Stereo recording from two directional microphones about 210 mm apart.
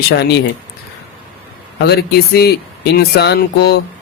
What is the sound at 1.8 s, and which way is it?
Speech, 50° left (ahead or behind).